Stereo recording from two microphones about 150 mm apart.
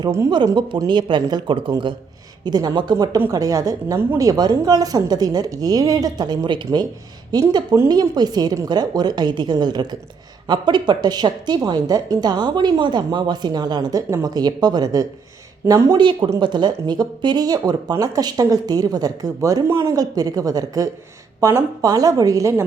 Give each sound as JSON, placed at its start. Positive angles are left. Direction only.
{"t": 0.3, "sound": "a woman's voice", "side_deg": -30}